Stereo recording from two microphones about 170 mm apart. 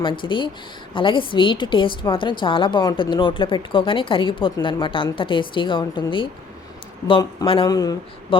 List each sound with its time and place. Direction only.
0.0 s a woman's voice: 30° left (ahead or behind)